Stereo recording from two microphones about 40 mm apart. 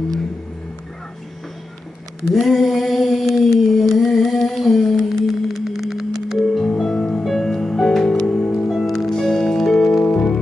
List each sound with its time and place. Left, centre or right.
2.3 s a sound: centre
6.7 s music: left
7.2 s music: centre
10.0 s music: left